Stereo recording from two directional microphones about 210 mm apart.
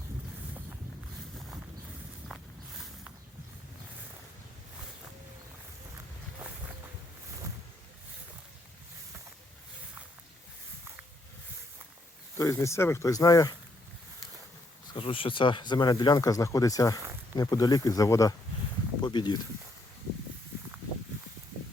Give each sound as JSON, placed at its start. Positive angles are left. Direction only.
{"t": 2.2, "sound": "walk", "side_deg": -5}
{"t": 12.4, "sound": "speech", "side_deg": 15}
{"t": 14.9, "sound": "speech", "side_deg": 25}